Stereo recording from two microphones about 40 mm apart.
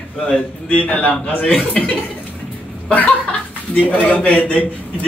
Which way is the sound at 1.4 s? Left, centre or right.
Left.